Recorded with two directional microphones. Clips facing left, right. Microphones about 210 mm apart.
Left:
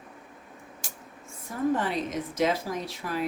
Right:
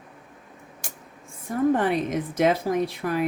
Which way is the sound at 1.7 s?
55° right (ahead or behind).